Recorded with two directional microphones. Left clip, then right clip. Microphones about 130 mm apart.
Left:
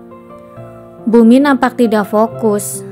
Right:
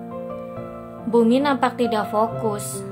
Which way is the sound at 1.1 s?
50° left (ahead or behind).